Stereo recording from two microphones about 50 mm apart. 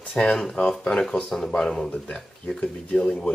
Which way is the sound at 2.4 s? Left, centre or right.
Centre.